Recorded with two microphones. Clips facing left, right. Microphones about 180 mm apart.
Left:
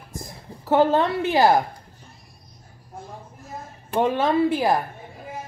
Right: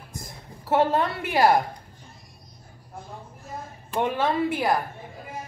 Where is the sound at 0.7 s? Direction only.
25° left (ahead or behind).